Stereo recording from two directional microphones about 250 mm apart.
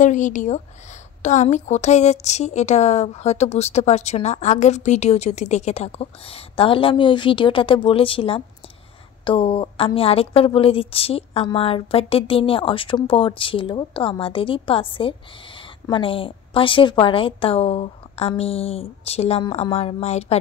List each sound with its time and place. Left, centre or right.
0.0 s a woman's voice: left